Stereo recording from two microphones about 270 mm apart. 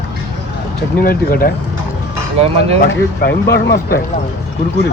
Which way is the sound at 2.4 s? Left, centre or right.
Right.